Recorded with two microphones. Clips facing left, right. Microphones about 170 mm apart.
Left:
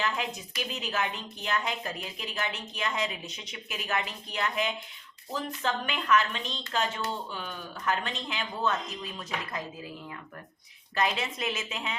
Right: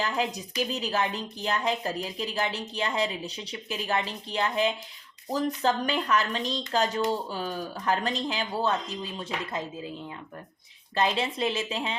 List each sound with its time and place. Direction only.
0.0 s a woman's voice: 35° right (ahead or behind)
10.9 s a woman's voice: 30° right (ahead or behind)